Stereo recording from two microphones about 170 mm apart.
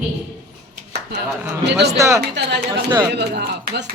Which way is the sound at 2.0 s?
15° right (ahead or behind).